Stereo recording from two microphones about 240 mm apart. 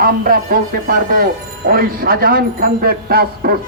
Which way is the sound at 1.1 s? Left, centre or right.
Right.